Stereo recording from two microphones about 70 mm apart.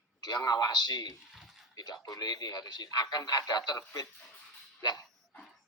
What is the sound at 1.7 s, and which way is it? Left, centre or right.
A man's voice, left.